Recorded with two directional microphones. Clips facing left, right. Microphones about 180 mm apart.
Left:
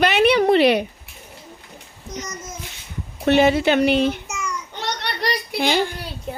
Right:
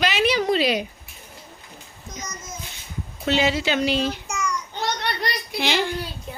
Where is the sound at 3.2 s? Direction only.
55° left (ahead or behind).